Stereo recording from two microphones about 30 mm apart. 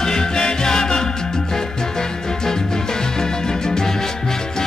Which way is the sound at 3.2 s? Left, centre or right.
Left.